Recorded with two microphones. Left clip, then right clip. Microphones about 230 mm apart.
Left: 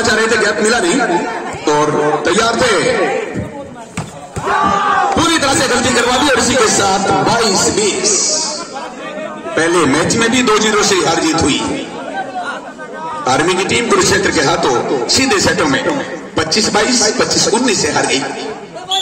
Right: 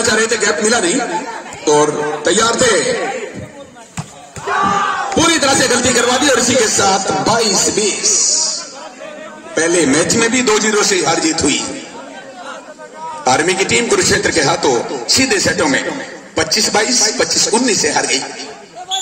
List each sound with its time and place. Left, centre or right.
0.0 s a man's voice: right
4.6 s battle cry: centre
5.2 s speech: right
9.6 s a man's voice: right
13.2 s a man's voice: right